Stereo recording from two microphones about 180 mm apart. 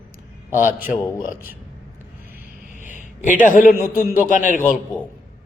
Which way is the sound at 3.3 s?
50° left (ahead or behind).